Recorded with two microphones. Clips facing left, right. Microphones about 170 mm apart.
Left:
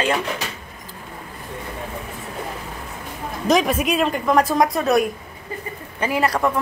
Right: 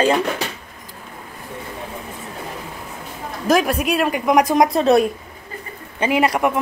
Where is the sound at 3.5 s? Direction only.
Centre (ahead or behind); by 4.7 s 15° right (ahead or behind).